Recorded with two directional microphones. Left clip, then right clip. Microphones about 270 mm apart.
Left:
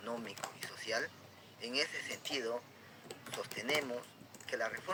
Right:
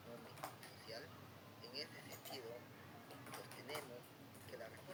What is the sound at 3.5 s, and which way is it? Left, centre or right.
Speech, centre.